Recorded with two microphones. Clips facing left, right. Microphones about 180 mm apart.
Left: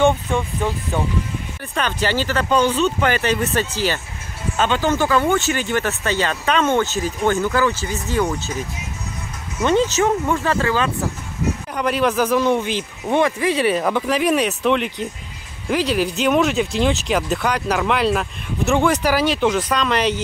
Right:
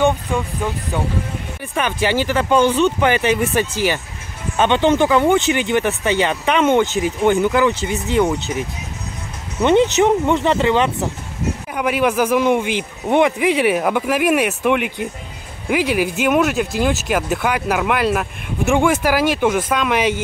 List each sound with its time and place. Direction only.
1.8 s a man's voice: 15° right (ahead or behind)
9.6 s speech: 20° right (ahead or behind)
11.7 s a man's voice: 10° right (ahead or behind)